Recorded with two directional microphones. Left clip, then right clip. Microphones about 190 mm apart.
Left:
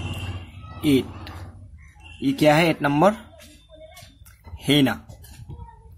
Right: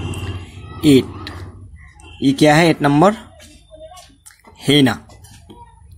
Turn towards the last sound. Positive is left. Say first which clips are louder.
# right 6 dB
turn(degrees=-15)  # may be behind; listen again after turning